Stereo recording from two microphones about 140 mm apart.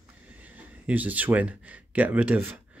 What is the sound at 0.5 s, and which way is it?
Speech, 10° right (ahead or behind).